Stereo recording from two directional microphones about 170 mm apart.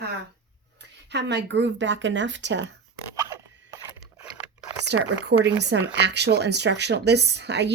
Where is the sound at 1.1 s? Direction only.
90° right.